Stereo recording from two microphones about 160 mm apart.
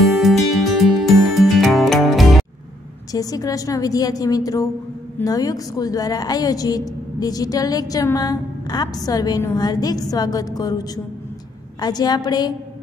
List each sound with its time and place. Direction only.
0.0 s music: centre (ahead or behind)
3.1 s a woman's voice: 20° left (ahead or behind)